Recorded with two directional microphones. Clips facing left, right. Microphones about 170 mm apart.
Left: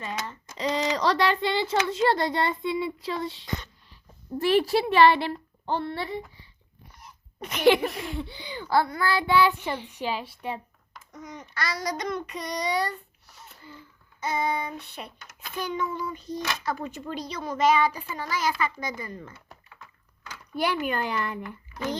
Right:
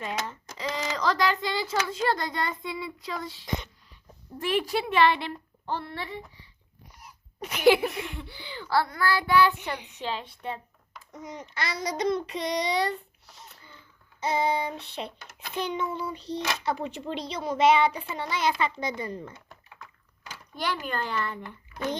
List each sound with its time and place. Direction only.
0.5 s speech: 20° left (ahead or behind)
4.4 s a woman's voice: 35° left (ahead or behind)
7.0 s a sound: 10° right (ahead or behind)
8.1 s child singing: 20° left (ahead or behind)
9.9 s speech: 10° left (ahead or behind)
11.2 s a child's voice: 25° right (ahead or behind)
14.2 s a child's voice: 25° right (ahead or behind)
20.6 s speech: 10° left (ahead or behind)